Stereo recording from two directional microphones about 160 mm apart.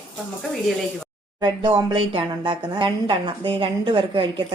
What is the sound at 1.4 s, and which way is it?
A woman's voice, 25° right (ahead or behind).